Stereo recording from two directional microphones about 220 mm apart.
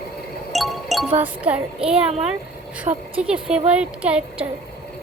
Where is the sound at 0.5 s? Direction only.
Centre (ahead or behind).